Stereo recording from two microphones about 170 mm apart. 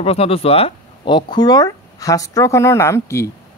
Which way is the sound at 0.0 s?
35° left (ahead or behind).